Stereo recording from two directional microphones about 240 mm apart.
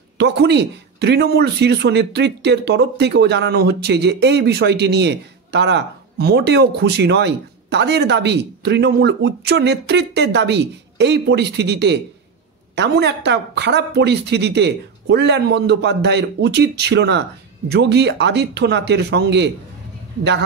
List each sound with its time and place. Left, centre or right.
0.2 s speech: right